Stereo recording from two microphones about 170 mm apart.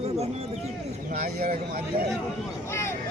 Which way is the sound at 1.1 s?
60° right (ahead or behind).